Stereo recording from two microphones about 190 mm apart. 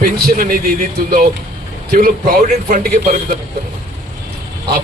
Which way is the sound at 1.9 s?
50° right (ahead or behind).